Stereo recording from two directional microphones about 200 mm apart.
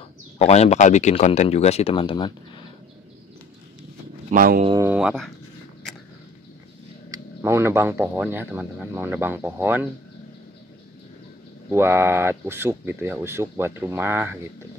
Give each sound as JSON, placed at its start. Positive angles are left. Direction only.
{"t": 0.4, "sound": "speech", "side_deg": 35}
{"t": 4.3, "sound": "speech", "side_deg": -40}
{"t": 4.8, "sound": "speech", "side_deg": -5}
{"t": 7.4, "sound": "speech", "side_deg": -15}
{"t": 11.7, "sound": "speech", "side_deg": -10}